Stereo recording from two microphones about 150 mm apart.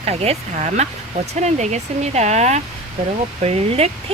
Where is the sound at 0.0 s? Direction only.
45° right (ahead or behind).